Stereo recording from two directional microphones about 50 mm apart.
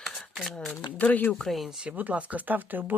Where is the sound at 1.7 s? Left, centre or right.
Centre.